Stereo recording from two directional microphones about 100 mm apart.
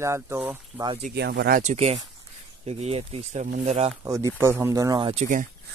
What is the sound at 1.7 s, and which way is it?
Speech, 90° right.